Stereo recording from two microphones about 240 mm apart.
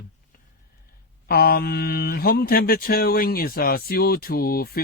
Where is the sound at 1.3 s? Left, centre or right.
Left.